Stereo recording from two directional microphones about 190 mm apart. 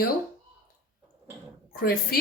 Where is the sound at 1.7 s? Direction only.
50° left (ahead or behind).